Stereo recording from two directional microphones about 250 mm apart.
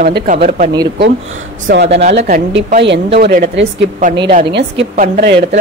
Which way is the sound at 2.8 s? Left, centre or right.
Right.